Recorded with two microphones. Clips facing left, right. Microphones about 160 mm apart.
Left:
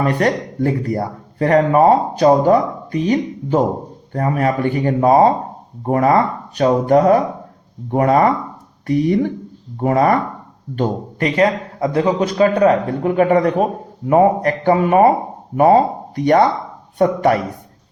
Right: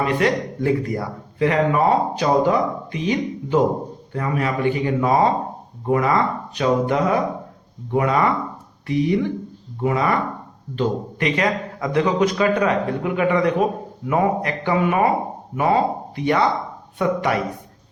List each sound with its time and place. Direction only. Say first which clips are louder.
0.0 s a man's voice: left 2 dB; 40° left (ahead or behind)